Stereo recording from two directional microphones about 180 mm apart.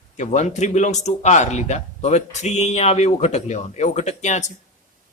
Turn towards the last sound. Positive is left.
turn(degrees=40)  # may be behind; listen again after turning